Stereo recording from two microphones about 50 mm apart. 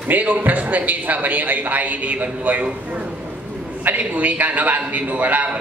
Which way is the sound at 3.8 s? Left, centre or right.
Right.